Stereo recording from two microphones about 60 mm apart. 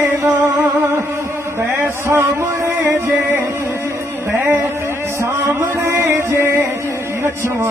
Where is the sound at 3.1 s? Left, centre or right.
Right.